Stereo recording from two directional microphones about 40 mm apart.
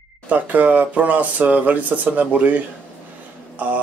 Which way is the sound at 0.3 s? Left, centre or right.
Right.